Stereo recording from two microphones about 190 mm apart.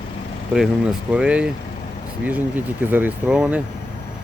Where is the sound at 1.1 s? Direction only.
5° right (ahead or behind).